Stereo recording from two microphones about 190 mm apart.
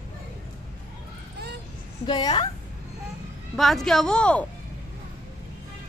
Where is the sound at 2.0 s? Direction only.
25° left (ahead or behind).